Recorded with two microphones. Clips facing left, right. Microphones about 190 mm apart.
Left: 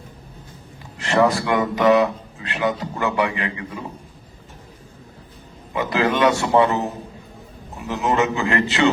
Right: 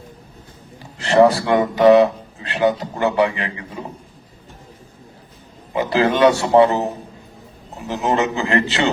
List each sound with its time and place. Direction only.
0.9 s speech: 35° right (ahead or behind)
5.7 s speech: 30° right (ahead or behind)
7.9 s speech: 30° right (ahead or behind)